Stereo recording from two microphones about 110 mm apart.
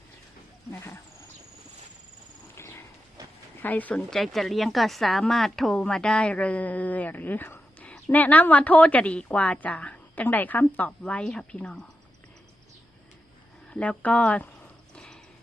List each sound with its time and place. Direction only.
2.6 s horse: 20° left (ahead or behind)
3.6 s a woman's voice: 15° left (ahead or behind)
4.1 s a woman's voice: centre (ahead or behind)
13.7 s a woman's voice: 10° left (ahead or behind)
14.9 s horse: 5° left (ahead or behind)